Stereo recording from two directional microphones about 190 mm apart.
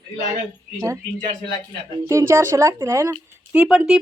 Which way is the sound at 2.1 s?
15° right (ahead or behind).